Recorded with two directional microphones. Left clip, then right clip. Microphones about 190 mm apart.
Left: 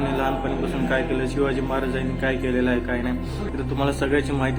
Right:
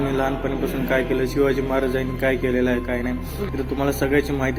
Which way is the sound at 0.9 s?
15° right (ahead or behind).